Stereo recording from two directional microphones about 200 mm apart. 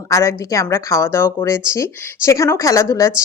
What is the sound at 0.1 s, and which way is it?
Speech, 15° left (ahead or behind).